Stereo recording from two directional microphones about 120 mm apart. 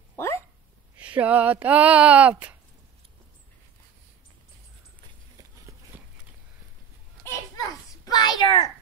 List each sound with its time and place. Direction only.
0.1 s dog: 20° left (ahead or behind)
0.9 s speech: 10° right (ahead or behind)
7.2 s a sound: 30° left (ahead or behind)